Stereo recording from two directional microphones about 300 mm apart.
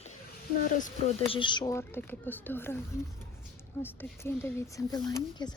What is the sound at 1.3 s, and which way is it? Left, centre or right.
Speech, centre.